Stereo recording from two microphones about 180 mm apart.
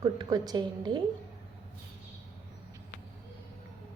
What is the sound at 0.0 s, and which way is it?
A woman's voice, 20° right (ahead or behind).